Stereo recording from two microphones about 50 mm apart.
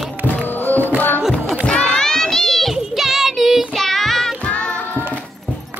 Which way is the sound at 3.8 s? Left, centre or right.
Centre.